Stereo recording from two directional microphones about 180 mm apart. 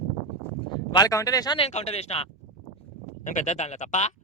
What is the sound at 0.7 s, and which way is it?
Speech, 20° left (ahead or behind).